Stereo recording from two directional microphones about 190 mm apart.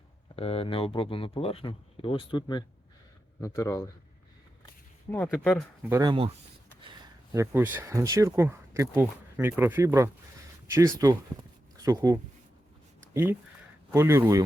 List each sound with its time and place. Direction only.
0.3 s speech: 30° left (ahead or behind)
5.3 s speech: 5° left (ahead or behind)
5.9 s speech: 20° right (ahead or behind)
7.3 s speech: 10° right (ahead or behind)
13.9 s speech: 15° right (ahead or behind)